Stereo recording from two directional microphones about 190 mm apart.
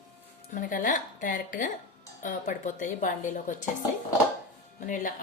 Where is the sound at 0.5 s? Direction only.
45° left (ahead or behind).